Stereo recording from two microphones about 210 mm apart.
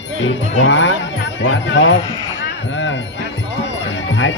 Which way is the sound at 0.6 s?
60° left (ahead or behind).